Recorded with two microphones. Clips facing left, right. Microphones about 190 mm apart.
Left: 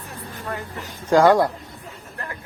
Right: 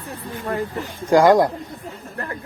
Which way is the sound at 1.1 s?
15° right (ahead or behind).